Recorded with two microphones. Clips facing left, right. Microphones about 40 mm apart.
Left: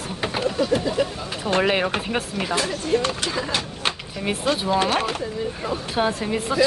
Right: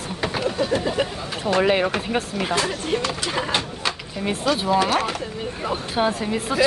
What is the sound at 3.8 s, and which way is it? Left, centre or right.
Drawer open or close, left.